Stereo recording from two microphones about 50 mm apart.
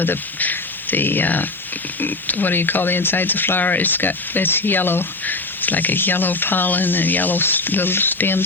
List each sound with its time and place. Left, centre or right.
0.0 s speech: left